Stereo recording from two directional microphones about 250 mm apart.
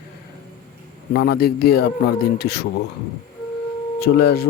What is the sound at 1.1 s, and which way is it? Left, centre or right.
Speech, left.